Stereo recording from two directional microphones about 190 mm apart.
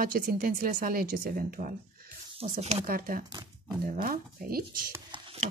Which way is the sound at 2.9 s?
50° right (ahead or behind).